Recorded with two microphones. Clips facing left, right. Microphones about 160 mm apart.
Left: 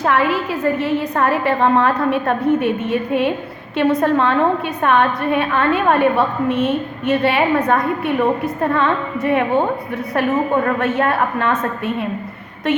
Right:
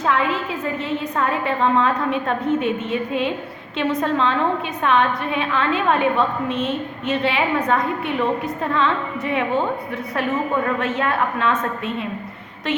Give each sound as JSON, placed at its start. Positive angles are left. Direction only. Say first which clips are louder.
{"t": 0.0, "sound": "a woman's voice", "louder": "left 4 dB", "side_deg": 70}
{"t": 10.8, "sound": "a woman's voice", "louder": "left 4 dB", "side_deg": 55}